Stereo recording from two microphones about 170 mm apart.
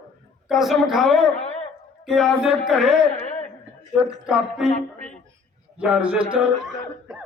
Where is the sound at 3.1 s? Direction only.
45° left (ahead or behind).